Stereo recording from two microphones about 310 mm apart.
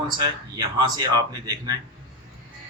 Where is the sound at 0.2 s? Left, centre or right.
Centre.